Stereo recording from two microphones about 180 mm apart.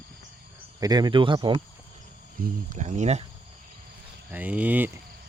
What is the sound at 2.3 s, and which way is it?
Speech, 50° right (ahead or behind).